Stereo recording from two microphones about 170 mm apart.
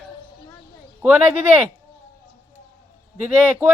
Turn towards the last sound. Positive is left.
turn(degrees=-10)  # may be behind; listen again after turning